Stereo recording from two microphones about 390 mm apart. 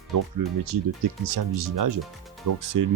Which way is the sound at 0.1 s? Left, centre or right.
Right.